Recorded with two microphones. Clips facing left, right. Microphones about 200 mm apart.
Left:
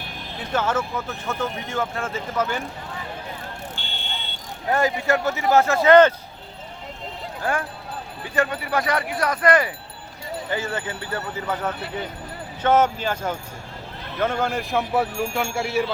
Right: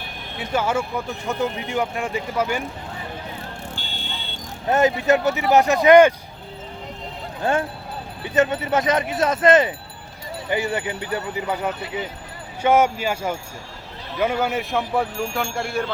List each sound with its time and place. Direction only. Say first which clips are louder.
0.3 s speech: right 1 dB; 10° right (ahead or behind)
3.8 s vehicle: right 1 dB; 40° right (ahead or behind)
4.7 s speech: right 4 dB; 20° right (ahead or behind)
7.4 s speech: right 4 dB; 25° right (ahead or behind); by 15.9 s 5° left (ahead or behind)